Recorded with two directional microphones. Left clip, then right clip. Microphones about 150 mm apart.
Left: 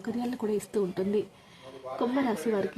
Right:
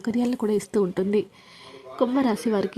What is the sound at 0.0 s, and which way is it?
Speech, 40° right (ahead or behind).